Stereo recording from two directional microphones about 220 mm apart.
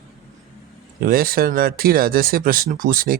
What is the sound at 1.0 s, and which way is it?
Speech, 40° right (ahead or behind).